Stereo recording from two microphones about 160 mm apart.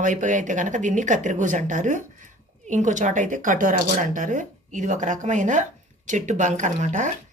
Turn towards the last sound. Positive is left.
turn(degrees=-50)  # may be behind; listen again after turning